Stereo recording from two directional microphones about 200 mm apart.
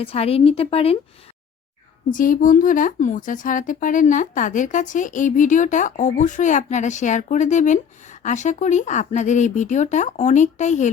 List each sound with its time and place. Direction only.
0.0 s a woman's voice: 30° left (ahead or behind)
2.0 s speech: 40° left (ahead or behind)